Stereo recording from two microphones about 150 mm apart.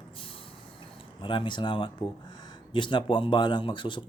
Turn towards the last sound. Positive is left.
turn(degrees=30)  # may be behind; listen again after turning